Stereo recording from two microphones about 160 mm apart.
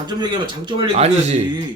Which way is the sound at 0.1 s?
25° right (ahead or behind).